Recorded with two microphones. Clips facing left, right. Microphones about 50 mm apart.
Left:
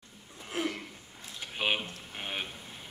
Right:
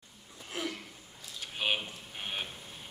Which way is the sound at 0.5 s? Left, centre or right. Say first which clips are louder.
Left 4 dB; left.